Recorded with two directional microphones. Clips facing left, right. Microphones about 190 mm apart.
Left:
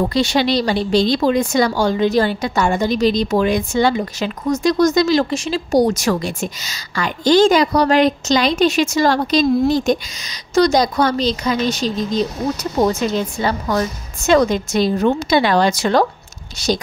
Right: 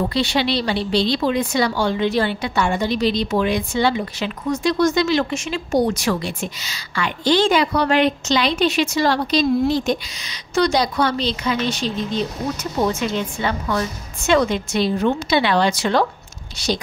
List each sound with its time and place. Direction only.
0.1 s speech: 45° left (ahead or behind)